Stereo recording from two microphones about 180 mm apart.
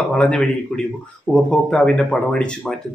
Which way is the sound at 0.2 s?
5° left (ahead or behind).